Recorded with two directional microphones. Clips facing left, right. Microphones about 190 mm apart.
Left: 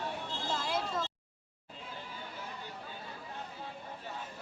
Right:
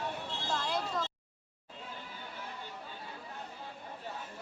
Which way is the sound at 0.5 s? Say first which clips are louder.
Right 1 dB; 5° left (ahead or behind).